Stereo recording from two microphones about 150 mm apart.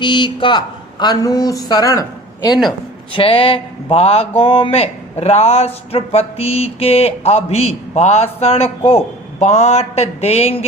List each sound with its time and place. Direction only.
0.0 s speech: 30° left (ahead or behind)
3.1 s speech: 35° left (ahead or behind)